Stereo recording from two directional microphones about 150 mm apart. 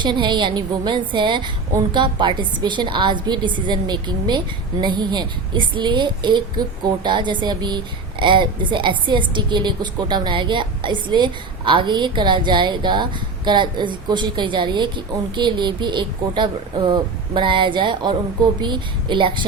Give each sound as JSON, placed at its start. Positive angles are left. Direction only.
{"t": 0.0, "sound": "a woman's voice", "side_deg": -30}